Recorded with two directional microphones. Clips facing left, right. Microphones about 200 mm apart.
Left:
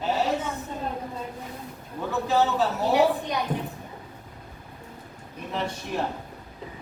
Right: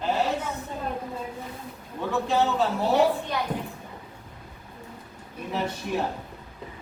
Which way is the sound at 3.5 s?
5° left (ahead or behind).